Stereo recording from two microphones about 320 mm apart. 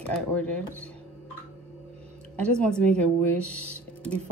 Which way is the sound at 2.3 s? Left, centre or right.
Centre.